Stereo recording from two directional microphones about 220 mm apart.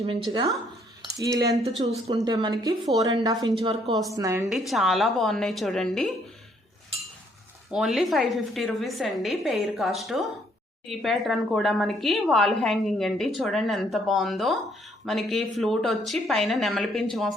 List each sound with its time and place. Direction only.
0.0 s speech: 20° right (ahead or behind)
1.8 s speech: 30° right (ahead or behind)
2.1 s speech: 15° right (ahead or behind)
4.1 s speech: 15° right (ahead or behind)
4.5 s a woman's voice: centre (ahead or behind)
7.7 s a woman's voice: centre (ahead or behind)